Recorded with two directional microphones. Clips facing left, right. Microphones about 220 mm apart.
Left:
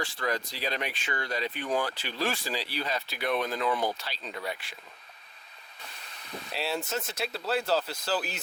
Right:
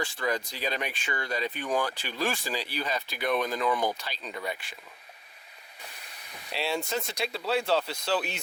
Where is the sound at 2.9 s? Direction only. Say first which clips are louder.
Right 2 dB; centre (ahead or behind).